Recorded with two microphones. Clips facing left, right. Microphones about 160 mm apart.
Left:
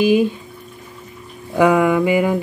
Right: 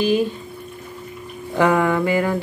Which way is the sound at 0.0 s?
15° left (ahead or behind).